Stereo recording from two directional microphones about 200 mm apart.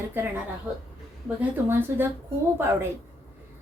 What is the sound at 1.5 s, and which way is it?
Speech, 10° right (ahead or behind).